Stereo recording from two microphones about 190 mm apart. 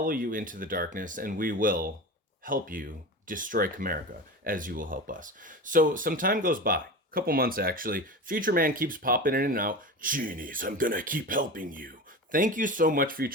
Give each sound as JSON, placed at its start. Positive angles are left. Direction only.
{"t": 0.0, "sound": "speech", "side_deg": -45}